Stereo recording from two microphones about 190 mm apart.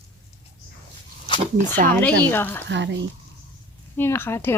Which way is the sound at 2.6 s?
70° right (ahead or behind).